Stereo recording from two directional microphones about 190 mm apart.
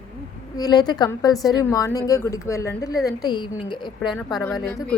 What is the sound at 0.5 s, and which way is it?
A woman's voice, 20° left (ahead or behind).